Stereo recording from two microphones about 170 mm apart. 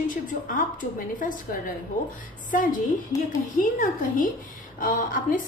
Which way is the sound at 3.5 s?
55° left (ahead or behind).